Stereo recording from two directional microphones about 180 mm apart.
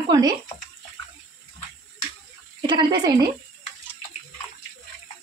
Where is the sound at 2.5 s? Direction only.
25° right (ahead or behind).